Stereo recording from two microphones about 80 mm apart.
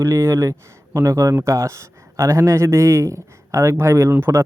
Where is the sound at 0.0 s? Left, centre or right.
Right.